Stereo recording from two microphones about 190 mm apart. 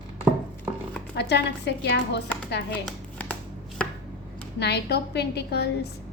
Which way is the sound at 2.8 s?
5° left (ahead or behind).